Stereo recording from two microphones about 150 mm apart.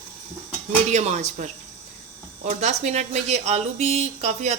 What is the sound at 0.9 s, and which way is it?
Speech, 50° right (ahead or behind).